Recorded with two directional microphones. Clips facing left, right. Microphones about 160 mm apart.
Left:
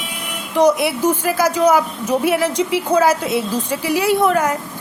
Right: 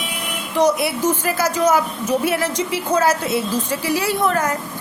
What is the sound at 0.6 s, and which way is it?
A woman's voice, 10° left (ahead or behind).